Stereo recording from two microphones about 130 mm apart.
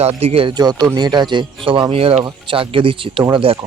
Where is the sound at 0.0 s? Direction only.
55° right (ahead or behind).